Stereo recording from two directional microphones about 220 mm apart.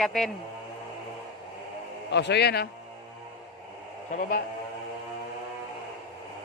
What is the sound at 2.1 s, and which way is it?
Speech, 50° left (ahead or behind).